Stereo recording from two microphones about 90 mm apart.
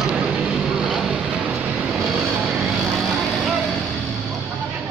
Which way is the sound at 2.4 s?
Centre (ahead or behind).